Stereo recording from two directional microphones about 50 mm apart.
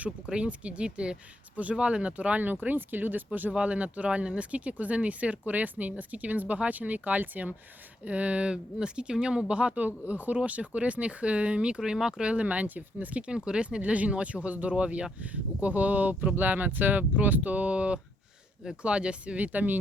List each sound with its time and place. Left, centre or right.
0.3 s speech: right
3.5 s speech: right
11.8 s speech: centre
12.2 s speech: right
19.4 s speech: right